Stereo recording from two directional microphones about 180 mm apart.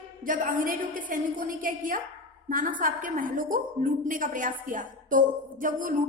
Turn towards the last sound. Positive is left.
turn(degrees=-50)  # may be behind; listen again after turning